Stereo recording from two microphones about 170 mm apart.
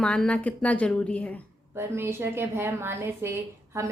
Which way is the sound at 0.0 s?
5° left (ahead or behind).